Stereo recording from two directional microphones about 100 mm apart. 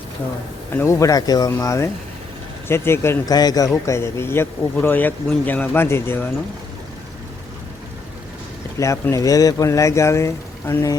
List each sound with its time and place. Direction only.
0.8 s speech: 30° left (ahead or behind)
1.5 s speech: 30° left (ahead or behind)
3.2 s speech: 40° left (ahead or behind)
3.8 s speech: 25° left (ahead or behind)
8.8 s speech: 30° left (ahead or behind)